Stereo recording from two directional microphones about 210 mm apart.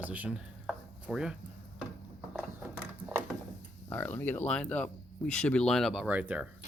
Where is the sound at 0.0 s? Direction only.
5° right (ahead or behind).